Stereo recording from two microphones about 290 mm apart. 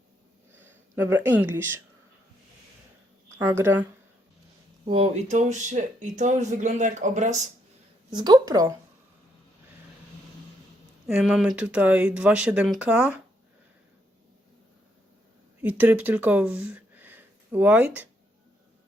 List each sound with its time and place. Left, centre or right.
0.9 s speech: centre
3.3 s speech: centre
4.9 s speech: centre
11.0 s speech: centre
15.6 s speech: centre